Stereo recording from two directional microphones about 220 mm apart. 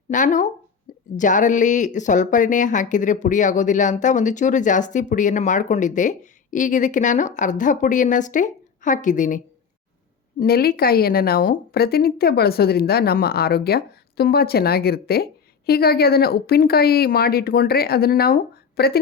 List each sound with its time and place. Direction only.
0.1 s speech: 35° left (ahead or behind)
10.4 s a woman's voice: 45° left (ahead or behind)